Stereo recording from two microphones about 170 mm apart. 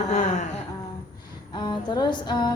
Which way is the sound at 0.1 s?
45° left (ahead or behind).